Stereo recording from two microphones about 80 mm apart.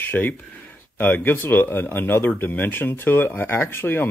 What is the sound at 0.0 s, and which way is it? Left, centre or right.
Speech, left.